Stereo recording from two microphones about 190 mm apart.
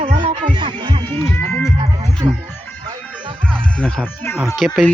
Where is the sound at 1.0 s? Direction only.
10° left (ahead or behind).